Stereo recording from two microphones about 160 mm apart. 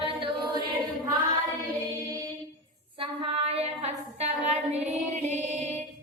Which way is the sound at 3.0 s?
40° right (ahead or behind).